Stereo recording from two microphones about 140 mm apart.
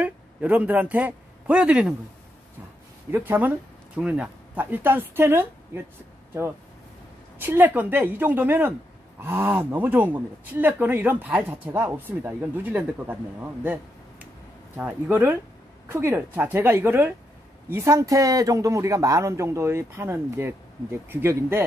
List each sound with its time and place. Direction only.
0.0 s a man's voice: 10° right (ahead or behind)
3.1 s speech: 15° right (ahead or behind)
7.3 s speech: 15° right (ahead or behind)
14.8 s a man's voice: 10° right (ahead or behind)